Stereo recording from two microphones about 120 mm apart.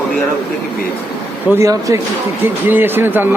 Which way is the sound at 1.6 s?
25° right (ahead or behind).